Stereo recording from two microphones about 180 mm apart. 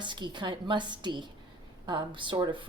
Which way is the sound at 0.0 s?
25° right (ahead or behind).